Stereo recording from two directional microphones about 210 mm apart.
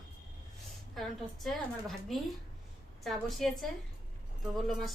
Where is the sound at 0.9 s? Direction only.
Centre (ahead or behind).